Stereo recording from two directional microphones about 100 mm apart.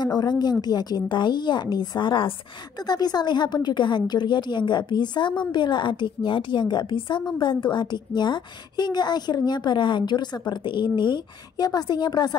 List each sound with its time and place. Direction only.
0.0 s a woman's voice: 45° left (ahead or behind)
2.9 s a woman's voice: 45° left (ahead or behind)